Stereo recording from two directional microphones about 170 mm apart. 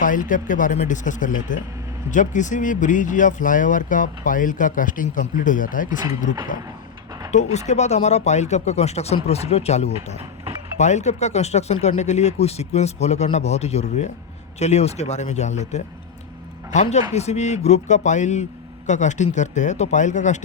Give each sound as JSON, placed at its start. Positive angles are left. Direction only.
{"t": 0.0, "sound": "speech", "side_deg": 50}
{"t": 7.3, "sound": "speech", "side_deg": 45}